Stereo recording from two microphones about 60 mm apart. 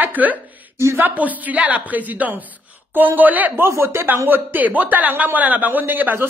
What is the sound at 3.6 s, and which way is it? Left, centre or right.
Speech, right.